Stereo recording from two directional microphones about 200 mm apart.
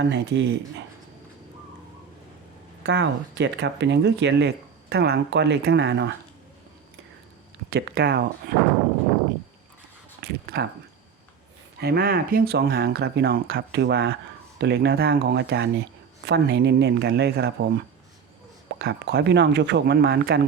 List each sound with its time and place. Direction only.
0.0 s speech: 60° right (ahead or behind)
2.8 s speech: 60° right (ahead or behind)
7.7 s speech: 50° right (ahead or behind)
10.2 s speech: 55° right (ahead or behind)
11.8 s speech: 50° right (ahead or behind)